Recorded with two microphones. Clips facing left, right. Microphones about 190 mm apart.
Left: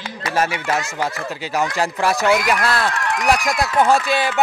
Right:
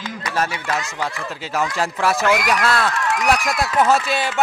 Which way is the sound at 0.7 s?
25° left (ahead or behind).